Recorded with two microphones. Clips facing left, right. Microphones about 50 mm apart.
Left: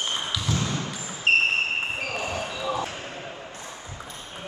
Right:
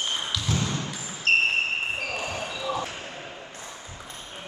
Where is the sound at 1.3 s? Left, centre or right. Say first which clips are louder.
Left 1 dB; centre.